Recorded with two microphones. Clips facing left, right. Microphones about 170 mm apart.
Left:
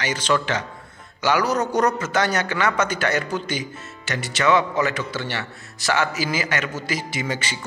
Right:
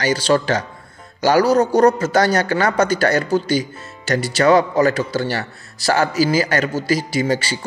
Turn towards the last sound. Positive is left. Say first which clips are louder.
# right 8 dB
turn(degrees=-35)  # may be behind; listen again after turning